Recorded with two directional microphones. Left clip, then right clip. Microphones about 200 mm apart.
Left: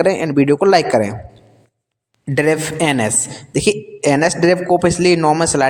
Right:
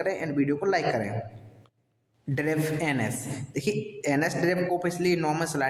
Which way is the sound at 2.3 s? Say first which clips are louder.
Left 12 dB; 40° left (ahead or behind).